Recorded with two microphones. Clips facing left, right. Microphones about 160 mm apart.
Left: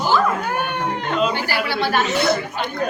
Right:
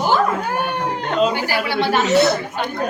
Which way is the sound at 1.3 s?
15° right (ahead or behind).